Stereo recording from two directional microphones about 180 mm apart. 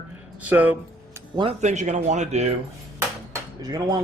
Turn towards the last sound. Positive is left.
turn(degrees=-20)  # may be behind; listen again after turning